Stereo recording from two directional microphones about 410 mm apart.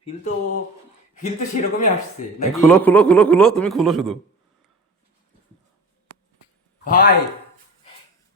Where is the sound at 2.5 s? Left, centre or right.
Centre.